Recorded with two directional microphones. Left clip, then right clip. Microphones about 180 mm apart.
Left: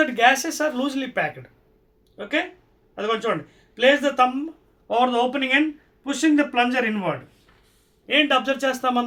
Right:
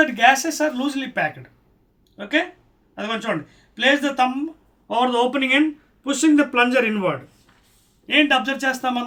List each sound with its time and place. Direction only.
0.0 s speech: 20° left (ahead or behind)
4.9 s speech: 5° left (ahead or behind)
8.0 s speech: 10° left (ahead or behind)